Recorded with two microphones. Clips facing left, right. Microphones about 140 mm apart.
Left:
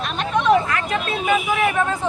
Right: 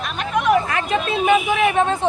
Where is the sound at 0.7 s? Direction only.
25° right (ahead or behind).